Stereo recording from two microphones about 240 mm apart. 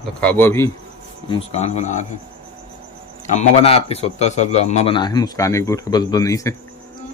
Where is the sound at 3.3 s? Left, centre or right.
Left.